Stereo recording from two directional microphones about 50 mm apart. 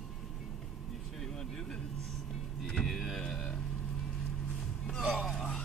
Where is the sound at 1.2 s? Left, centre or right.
Centre.